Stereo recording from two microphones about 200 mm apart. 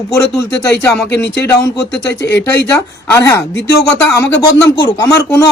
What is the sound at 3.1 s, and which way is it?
Speech, 15° left (ahead or behind).